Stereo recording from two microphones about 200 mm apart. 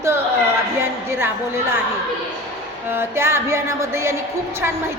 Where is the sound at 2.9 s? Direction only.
10° right (ahead or behind).